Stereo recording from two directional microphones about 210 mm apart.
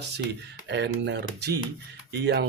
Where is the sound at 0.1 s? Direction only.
55° right (ahead or behind).